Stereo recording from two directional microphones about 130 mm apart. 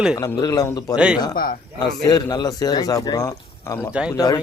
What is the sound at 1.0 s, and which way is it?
Speech, 5° right (ahead or behind).